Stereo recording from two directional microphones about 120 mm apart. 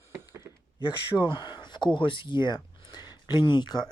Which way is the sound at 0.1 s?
20° right (ahead or behind).